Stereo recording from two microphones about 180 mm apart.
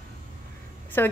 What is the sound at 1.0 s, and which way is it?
Speech, 10° left (ahead or behind).